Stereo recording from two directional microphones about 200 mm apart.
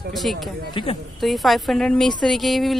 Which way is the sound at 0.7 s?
25° left (ahead or behind).